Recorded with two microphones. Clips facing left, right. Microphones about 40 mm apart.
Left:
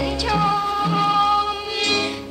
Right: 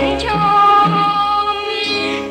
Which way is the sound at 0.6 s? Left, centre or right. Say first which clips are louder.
Right 12 dB; right.